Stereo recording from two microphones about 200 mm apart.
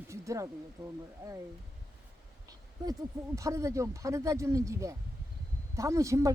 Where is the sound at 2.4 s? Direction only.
15° right (ahead or behind).